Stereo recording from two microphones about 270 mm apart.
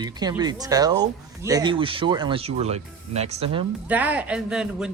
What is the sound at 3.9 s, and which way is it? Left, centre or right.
Speech, centre.